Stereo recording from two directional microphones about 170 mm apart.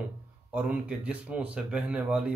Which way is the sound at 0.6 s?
5° right (ahead or behind).